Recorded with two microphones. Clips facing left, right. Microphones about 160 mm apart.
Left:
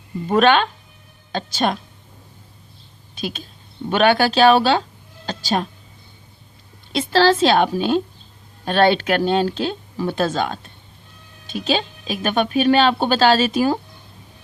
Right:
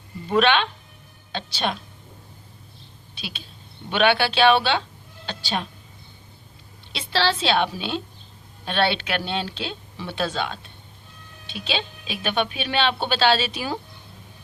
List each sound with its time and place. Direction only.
0.3 s a woman's voice: 45° left (ahead or behind)
3.2 s speech: 45° left (ahead or behind)
6.9 s a woman's voice: 45° left (ahead or behind)